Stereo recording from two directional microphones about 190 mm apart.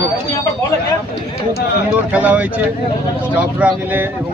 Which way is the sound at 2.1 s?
10° right (ahead or behind).